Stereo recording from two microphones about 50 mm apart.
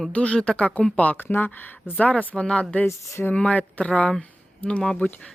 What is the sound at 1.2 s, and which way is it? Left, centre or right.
Speech, left.